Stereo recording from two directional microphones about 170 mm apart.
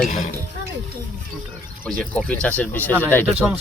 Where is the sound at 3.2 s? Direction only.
10° right (ahead or behind).